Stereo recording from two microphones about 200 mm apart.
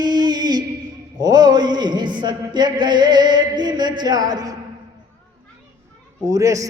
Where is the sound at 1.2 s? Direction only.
20° right (ahead or behind).